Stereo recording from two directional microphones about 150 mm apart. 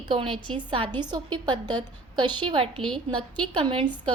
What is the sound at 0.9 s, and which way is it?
A woman's voice, 30° right (ahead or behind).